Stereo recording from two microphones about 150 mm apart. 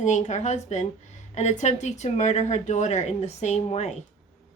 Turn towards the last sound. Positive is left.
turn(degrees=50)  # may be behind; listen again after turning